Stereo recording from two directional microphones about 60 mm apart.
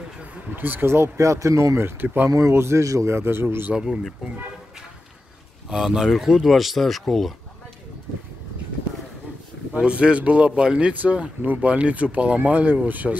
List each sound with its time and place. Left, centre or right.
0.6 s speech: right
1.2 s speech: right
1.8 s speech: right
2.2 s a man's voice: right
3.1 s speech: right
3.7 s speech: centre
5.7 s speech: centre
9.8 s speech: centre